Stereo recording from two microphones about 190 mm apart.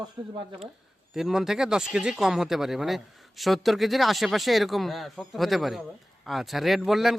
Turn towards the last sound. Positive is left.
turn(degrees=0)  # may be behind; listen again after turning